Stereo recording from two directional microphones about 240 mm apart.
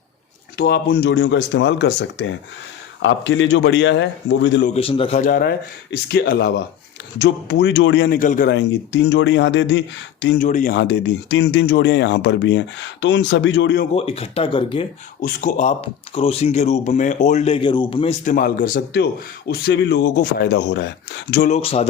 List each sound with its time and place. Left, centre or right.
0.5 s speech: left
4.7 s speech: left
8.5 s speech: left
10.3 s speech: left
13.9 s speech: left
15.2 s speech: left
21.5 s speech: left